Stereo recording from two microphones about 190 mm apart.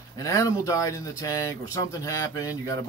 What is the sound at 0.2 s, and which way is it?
Speech, 15° left (ahead or behind).